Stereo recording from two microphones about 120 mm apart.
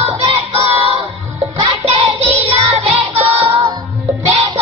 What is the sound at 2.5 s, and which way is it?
Music, 55° right (ahead or behind).